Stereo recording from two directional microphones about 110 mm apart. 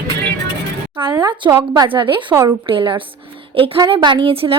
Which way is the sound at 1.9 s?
50° right (ahead or behind).